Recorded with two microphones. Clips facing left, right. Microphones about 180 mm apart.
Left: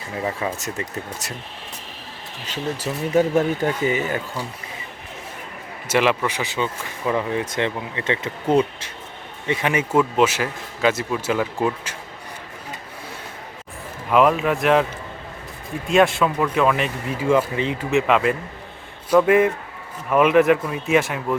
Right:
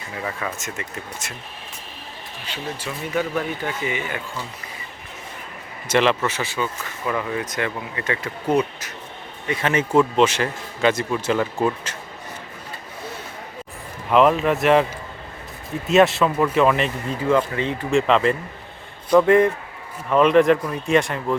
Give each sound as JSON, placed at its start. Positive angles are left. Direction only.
{"t": 0.2, "sound": "speech", "side_deg": 25}
{"t": 2.5, "sound": "speech", "side_deg": 40}
{"t": 5.9, "sound": "speech", "side_deg": 10}
{"t": 9.5, "sound": "speech", "side_deg": 15}
{"t": 11.9, "sound": "a sound", "side_deg": 10}
{"t": 14.1, "sound": "speech", "side_deg": 0}
{"t": 15.9, "sound": "speech", "side_deg": 0}
{"t": 17.9, "sound": "speech", "side_deg": 5}